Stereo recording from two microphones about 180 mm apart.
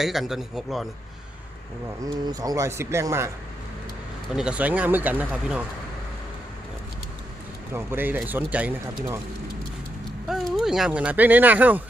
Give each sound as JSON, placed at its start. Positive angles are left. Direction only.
{"t": 0.0, "sound": "a man's voice", "side_deg": 0}
{"t": 2.2, "sound": "speech", "side_deg": -20}
{"t": 4.3, "sound": "speech", "side_deg": -5}
{"t": 7.7, "sound": "speech", "side_deg": -15}
{"t": 10.2, "sound": "speech", "side_deg": 0}